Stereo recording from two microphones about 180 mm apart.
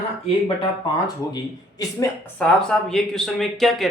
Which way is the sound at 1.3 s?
20° left (ahead or behind).